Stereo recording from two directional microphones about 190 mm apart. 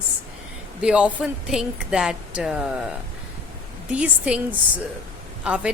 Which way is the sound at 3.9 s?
5° right (ahead or behind).